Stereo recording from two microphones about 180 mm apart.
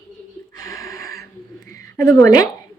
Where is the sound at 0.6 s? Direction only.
20° left (ahead or behind).